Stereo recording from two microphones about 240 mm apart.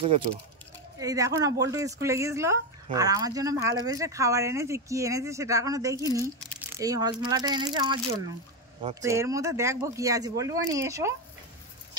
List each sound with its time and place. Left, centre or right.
0.0 s speech: right
0.9 s speech: centre